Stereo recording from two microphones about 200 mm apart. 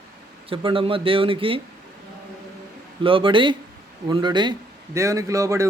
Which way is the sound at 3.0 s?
25° right (ahead or behind).